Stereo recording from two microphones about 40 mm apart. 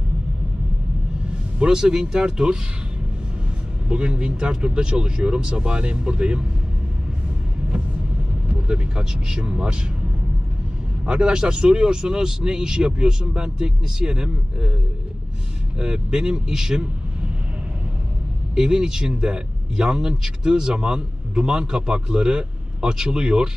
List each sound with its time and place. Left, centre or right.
1.6 s speech: centre
3.9 s a man's voice: right
8.5 s vehicle: right
8.9 s a man's voice: right
11.1 s a man's voice: right
15.8 s a man's voice: centre
18.5 s a man's voice: centre